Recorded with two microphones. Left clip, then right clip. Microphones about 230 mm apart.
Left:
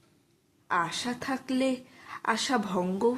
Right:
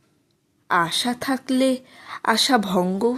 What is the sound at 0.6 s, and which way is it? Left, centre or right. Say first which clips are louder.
Speech: right 8 dB; right.